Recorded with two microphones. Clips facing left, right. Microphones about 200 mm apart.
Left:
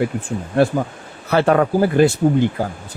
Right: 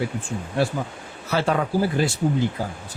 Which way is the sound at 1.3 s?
60° left (ahead or behind).